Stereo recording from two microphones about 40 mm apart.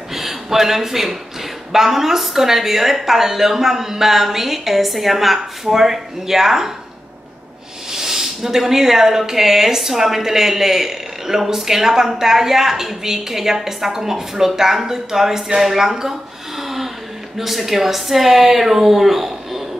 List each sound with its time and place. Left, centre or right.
0.1 s a sound: centre
1.7 s speech: centre
7.9 s speech: centre